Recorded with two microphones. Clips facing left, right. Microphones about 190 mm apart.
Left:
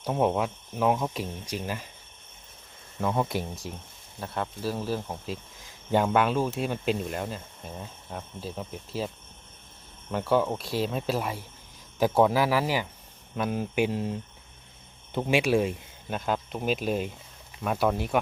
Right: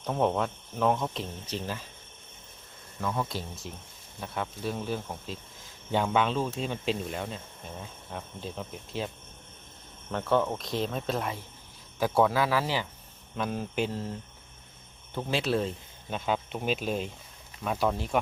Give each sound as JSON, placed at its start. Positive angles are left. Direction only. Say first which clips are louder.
{"t": 0.0, "sound": "speech", "louder": "left 2 dB", "side_deg": 10}
{"t": 3.0, "sound": "speech", "louder": "left 4 dB", "side_deg": 25}
{"t": 3.3, "sound": "speech", "louder": "left 5 dB", "side_deg": 15}
{"t": 4.2, "sound": "speech", "louder": "left 2 dB", "side_deg": 0}
{"t": 11.9, "sound": "speech", "louder": "left 3 dB", "side_deg": 15}